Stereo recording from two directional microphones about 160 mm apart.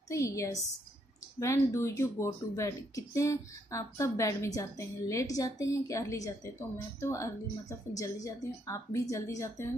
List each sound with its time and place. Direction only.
0.1 s speech: 20° left (ahead or behind)